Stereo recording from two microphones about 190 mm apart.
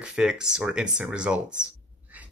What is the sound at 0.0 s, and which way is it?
Speech, 5° right (ahead or behind).